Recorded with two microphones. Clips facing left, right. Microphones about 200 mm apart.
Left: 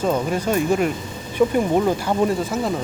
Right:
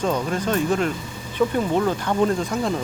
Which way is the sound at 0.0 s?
10° left (ahead or behind).